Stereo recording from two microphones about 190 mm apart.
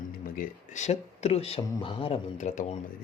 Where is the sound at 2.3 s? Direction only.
40° left (ahead or behind).